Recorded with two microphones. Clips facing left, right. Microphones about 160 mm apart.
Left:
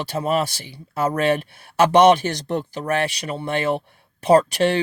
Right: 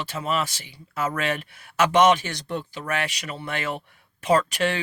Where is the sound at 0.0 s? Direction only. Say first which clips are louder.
Left 5 dB; 40° left (ahead or behind).